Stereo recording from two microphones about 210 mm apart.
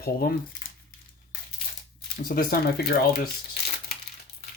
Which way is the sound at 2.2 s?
45° left (ahead or behind).